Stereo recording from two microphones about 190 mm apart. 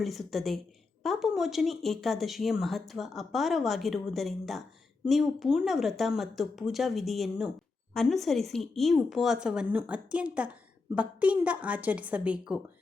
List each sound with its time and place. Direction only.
0.0 s speech: centre (ahead or behind)